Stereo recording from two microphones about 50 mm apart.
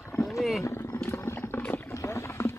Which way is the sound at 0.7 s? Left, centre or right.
Left.